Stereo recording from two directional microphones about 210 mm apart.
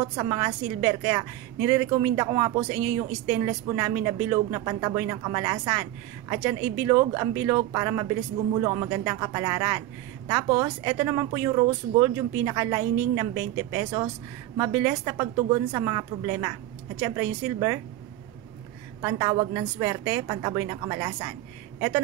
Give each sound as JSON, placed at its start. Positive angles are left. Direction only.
{"t": 0.0, "sound": "a woman's voice", "side_deg": -20}
{"t": 18.9, "sound": "a woman's voice", "side_deg": -20}